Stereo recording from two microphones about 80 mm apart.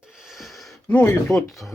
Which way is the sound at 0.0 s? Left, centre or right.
Centre.